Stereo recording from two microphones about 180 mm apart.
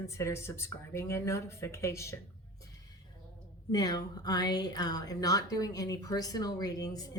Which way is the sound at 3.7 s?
20° left (ahead or behind).